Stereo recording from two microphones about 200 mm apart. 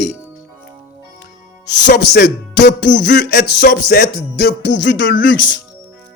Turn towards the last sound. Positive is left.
turn(degrees=65)  # may be behind; listen again after turning